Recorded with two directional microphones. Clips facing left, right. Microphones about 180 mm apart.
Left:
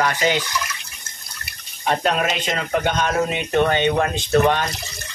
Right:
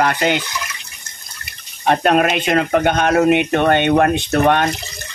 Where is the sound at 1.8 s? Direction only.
60° right (ahead or behind).